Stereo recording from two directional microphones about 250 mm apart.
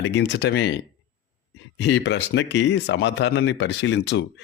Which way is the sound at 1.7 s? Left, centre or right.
Left.